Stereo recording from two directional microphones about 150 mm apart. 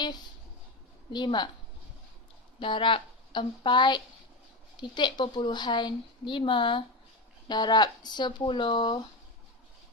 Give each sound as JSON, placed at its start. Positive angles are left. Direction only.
{"t": 1.1, "sound": "speech", "side_deg": 30}
{"t": 2.6, "sound": "a woman's voice", "side_deg": 35}